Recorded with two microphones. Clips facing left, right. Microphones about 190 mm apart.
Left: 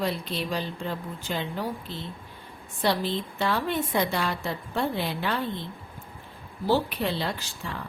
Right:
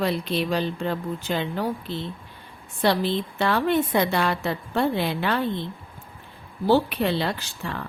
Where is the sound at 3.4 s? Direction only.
65° right (ahead or behind).